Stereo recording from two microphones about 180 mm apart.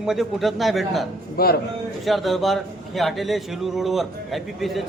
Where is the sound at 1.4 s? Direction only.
55° left (ahead or behind).